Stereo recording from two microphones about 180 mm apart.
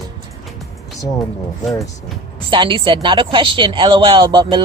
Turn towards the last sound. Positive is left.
turn(degrees=-25)  # may be behind; listen again after turning